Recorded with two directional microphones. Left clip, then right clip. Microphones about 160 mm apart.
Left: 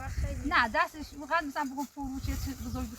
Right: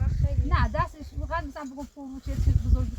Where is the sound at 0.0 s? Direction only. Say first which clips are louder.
Right 1 dB; 85° right.